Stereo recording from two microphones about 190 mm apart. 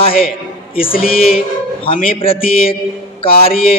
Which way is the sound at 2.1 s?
30° left (ahead or behind).